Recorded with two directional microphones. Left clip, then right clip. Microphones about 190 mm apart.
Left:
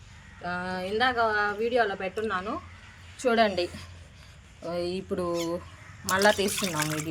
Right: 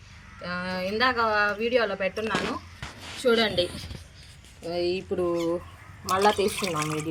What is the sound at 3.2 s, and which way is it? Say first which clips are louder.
Speech: right 1 dB; 45° left (ahead or behind).